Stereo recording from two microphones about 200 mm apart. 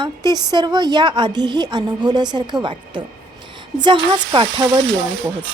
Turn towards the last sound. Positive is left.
turn(degrees=-70)  # may be behind; listen again after turning